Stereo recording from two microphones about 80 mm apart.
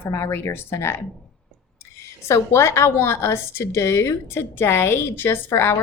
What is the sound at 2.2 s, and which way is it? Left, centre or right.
A woman's voice, left.